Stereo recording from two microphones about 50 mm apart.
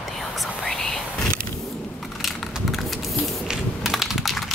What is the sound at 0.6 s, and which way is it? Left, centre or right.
Whispering, centre.